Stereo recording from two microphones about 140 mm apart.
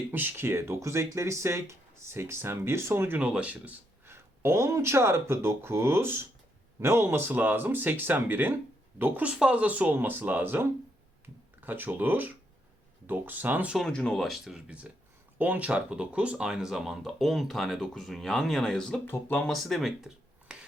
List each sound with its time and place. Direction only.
0.1 s speech: 15° right (ahead or behind)
13.7 s speech: 5° left (ahead or behind)
19.5 s speech: centre (ahead or behind)